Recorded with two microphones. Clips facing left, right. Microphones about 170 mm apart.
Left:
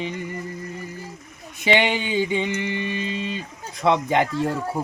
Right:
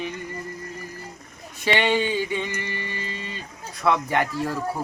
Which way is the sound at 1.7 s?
15° left (ahead or behind).